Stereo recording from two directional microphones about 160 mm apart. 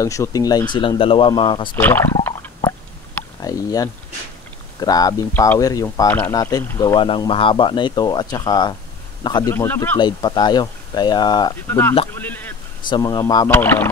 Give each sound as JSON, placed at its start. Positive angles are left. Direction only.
{"t": 0.0, "sound": "speech", "side_deg": 20}
{"t": 1.8, "sound": "a sound", "side_deg": 15}
{"t": 3.4, "sound": "speech", "side_deg": 20}
{"t": 6.8, "sound": "speech", "side_deg": 30}
{"t": 9.9, "sound": "speech", "side_deg": 25}
{"t": 12.2, "sound": "a sound", "side_deg": 10}
{"t": 12.9, "sound": "speech", "side_deg": 25}
{"t": 13.5, "sound": "speech", "side_deg": 15}